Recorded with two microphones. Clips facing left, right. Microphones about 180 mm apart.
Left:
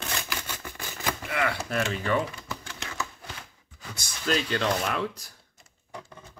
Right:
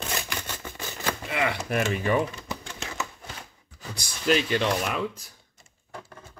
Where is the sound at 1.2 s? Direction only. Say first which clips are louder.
Right 1 dB; 20° right (ahead or behind).